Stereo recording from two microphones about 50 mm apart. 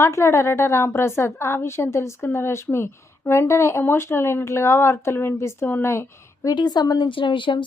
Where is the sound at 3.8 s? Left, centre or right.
Left.